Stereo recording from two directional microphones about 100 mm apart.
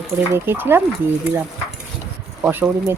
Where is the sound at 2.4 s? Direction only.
20° right (ahead or behind).